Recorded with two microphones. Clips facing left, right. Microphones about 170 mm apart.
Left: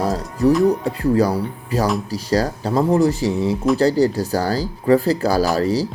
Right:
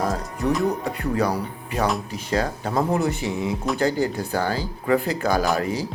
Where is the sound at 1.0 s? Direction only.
30° left (ahead or behind).